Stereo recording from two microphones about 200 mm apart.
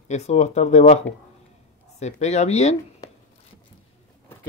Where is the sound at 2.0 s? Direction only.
35° left (ahead or behind).